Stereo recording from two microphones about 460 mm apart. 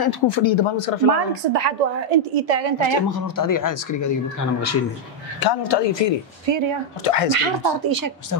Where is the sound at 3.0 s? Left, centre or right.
Left.